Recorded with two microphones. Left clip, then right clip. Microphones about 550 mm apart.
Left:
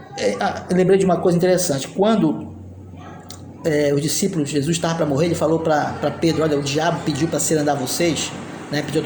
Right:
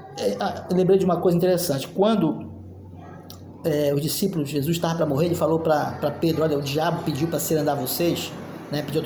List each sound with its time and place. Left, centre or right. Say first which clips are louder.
0.2 s speech: left 4 dB; right
3.6 s speech: left 4 dB; right